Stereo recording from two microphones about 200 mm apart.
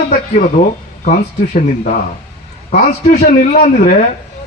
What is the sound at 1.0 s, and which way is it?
A man's voice, 35° left (ahead or behind).